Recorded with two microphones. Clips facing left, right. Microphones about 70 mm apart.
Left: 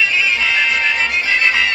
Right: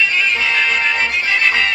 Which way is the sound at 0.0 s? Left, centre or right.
Centre.